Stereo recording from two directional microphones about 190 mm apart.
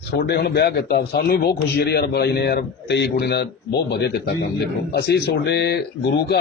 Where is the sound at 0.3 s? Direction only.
60° left (ahead or behind).